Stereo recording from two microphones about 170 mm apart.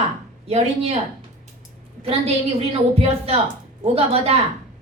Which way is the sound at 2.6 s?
35° right (ahead or behind).